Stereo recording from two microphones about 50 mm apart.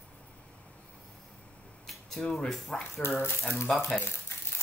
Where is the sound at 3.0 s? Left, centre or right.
Left.